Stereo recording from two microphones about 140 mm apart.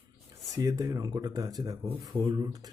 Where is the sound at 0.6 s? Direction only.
25° right (ahead or behind).